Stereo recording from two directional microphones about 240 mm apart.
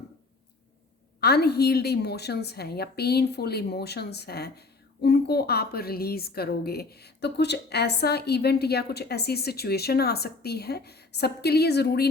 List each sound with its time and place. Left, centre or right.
1.2 s a woman's voice: left